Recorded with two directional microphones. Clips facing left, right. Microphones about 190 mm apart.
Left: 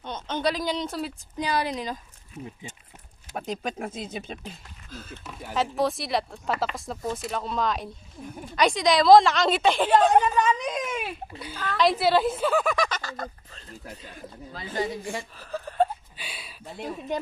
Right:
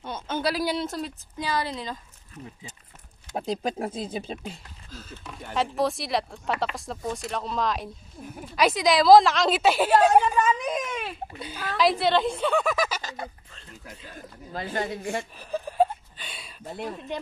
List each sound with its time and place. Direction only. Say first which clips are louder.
0.0 s a woman's voice: left 1 dB; 5° right (ahead or behind)
1.4 s speech: left 2 dB; 15° left (ahead or behind)
3.3 s speech: right 3 dB; 35° right (ahead or behind)
5.2 s speech: even; 5° left (ahead or behind)
13.0 s fowl: left 1 dB; 15° right (ahead or behind)
13.5 s speech: left 3 dB; 40° left (ahead or behind)
14.5 s speech: even; 60° right (ahead or behind)
15.3 s speech: right 3 dB; 15° right (ahead or behind)
16.2 s a sound: left 1 dB; 5° left (ahead or behind)
17.1 s speech: left 5 dB; 45° left (ahead or behind)